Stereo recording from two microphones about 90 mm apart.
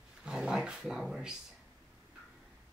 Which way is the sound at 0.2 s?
10° right (ahead or behind).